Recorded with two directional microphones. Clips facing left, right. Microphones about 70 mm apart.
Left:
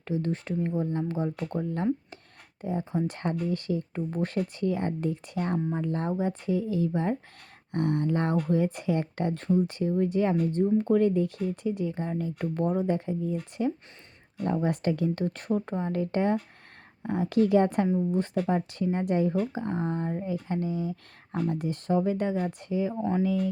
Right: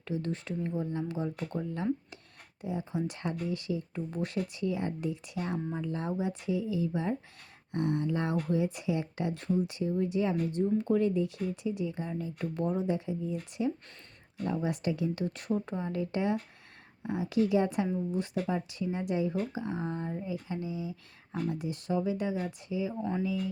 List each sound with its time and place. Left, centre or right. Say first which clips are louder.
0.0 s speech: left 5 dB; left
2.6 s speech: left 4 dB; left